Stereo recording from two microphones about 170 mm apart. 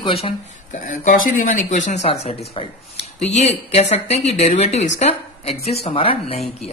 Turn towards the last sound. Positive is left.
turn(degrees=35)  # may be behind; listen again after turning